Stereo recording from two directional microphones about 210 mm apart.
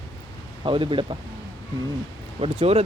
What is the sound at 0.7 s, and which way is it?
Speech, 25° right (ahead or behind).